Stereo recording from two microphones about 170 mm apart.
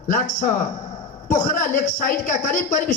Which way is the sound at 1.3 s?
50° left (ahead or behind).